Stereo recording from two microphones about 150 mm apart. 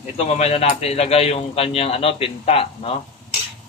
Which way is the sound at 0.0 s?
45° left (ahead or behind).